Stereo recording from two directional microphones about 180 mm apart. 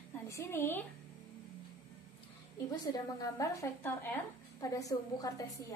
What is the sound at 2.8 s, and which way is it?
A woman's voice, 20° left (ahead or behind).